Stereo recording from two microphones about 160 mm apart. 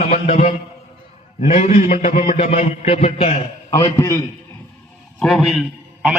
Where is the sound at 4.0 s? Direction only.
20° left (ahead or behind).